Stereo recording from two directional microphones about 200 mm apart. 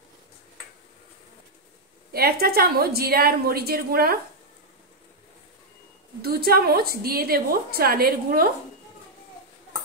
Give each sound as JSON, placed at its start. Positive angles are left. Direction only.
{"t": 2.1, "sound": "a woman's voice", "side_deg": -50}
{"t": 6.2, "sound": "a woman's voice", "side_deg": -50}